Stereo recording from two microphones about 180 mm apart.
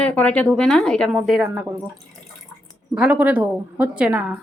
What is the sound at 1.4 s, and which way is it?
Speech, 10° right (ahead or behind).